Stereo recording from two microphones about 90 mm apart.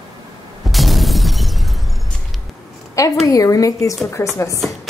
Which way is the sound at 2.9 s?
40° left (ahead or behind).